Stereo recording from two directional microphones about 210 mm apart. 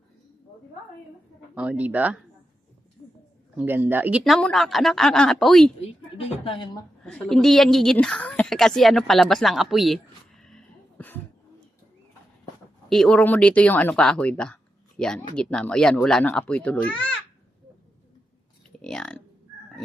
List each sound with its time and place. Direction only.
1.5 s speech: 5° right (ahead or behind)
3.6 s speech: 10° right (ahead or behind)
4.2 s speech: 5° left (ahead or behind)
5.8 s speech: 25° left (ahead or behind)
7.0 s a woman's voice: centre (ahead or behind)
12.9 s speech: 5° left (ahead or behind)
18.8 s speech: 5° left (ahead or behind)